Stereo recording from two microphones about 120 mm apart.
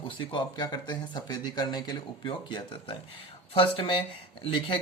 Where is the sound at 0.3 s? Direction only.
40° left (ahead or behind).